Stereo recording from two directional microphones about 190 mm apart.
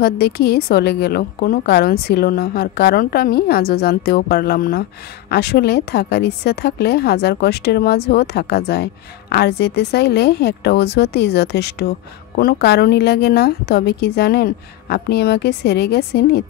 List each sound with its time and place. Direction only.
0.0 s a woman's voice: 55° left (ahead or behind)